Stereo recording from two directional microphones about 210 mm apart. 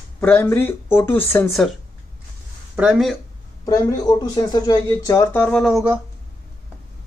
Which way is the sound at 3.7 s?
15° left (ahead or behind).